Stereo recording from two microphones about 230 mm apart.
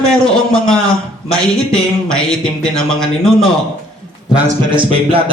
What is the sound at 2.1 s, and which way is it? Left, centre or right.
A man's voice, centre.